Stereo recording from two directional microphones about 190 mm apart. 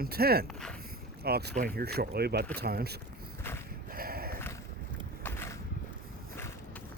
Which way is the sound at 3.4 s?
10° left (ahead or behind).